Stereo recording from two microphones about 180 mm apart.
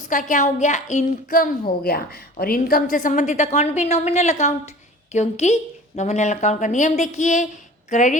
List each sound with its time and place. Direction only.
0.1 s a woman's voice: 45° left (ahead or behind)